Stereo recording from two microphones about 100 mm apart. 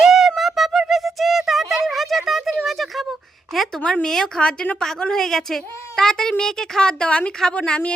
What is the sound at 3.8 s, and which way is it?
A woman's voice, 10° left (ahead or behind).